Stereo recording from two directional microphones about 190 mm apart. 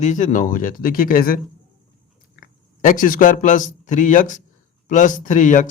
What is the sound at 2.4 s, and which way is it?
Speech, 45° left (ahead or behind).